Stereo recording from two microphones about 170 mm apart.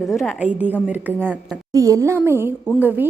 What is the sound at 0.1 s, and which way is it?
A woman's voice, centre (ahead or behind).